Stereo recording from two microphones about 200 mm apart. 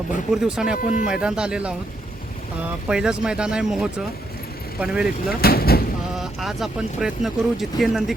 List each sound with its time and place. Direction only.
0.3 s speech: 5° right (ahead or behind)
0.8 s speech: 40° left (ahead or behind)
1.0 s speech: 5° right (ahead or behind)
2.9 s speech: 5° right (ahead or behind)
5.4 s speech: 50° left (ahead or behind)
6.1 s speech: centre (ahead or behind)